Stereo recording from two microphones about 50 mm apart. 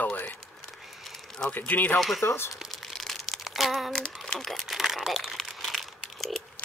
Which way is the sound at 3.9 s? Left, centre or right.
Centre.